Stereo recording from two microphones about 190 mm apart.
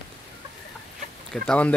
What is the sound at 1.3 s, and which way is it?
Speech, 5° left (ahead or behind).